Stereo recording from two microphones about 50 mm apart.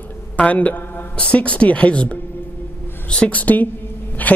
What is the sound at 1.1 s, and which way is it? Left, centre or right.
Speech, left.